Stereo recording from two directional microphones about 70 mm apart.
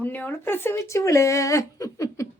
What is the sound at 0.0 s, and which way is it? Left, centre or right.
Speech, left.